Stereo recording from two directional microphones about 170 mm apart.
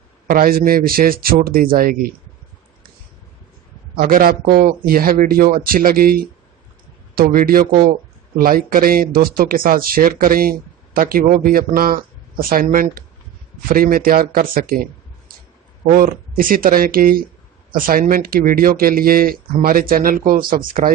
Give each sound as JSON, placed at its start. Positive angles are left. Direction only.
{"t": 0.3, "sound": "speech", "side_deg": -55}
{"t": 3.9, "sound": "speech", "side_deg": -60}